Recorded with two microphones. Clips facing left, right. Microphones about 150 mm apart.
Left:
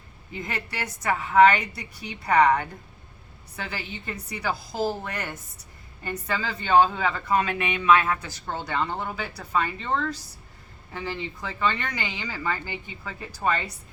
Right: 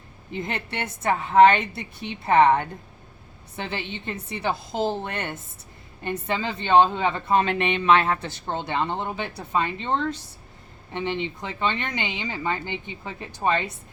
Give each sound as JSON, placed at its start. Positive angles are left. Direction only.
{"t": 0.3, "sound": "speech", "side_deg": -25}